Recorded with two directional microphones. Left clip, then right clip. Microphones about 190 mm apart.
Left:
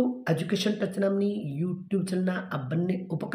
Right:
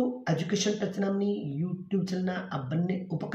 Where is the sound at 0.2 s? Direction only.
40° left (ahead or behind).